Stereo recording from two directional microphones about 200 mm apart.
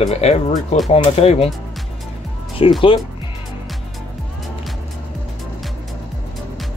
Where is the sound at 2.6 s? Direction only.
30° left (ahead or behind).